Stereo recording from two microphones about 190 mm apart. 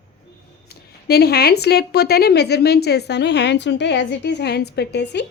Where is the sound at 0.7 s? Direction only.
55° left (ahead or behind).